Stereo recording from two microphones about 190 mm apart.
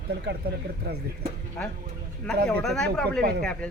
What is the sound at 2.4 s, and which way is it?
Speech, 5° left (ahead or behind).